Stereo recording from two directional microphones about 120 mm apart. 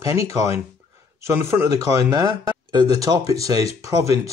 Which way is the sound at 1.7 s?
30° right (ahead or behind).